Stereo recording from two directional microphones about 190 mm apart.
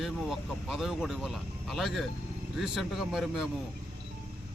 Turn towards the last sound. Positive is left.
turn(degrees=0)  # may be behind; listen again after turning